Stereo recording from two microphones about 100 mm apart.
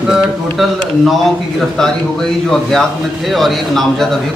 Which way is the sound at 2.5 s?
5° left (ahead or behind).